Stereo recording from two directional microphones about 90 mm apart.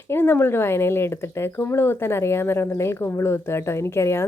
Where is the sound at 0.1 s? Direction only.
25° left (ahead or behind).